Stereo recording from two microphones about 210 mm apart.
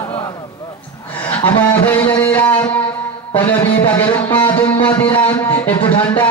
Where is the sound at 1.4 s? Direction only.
10° left (ahead or behind).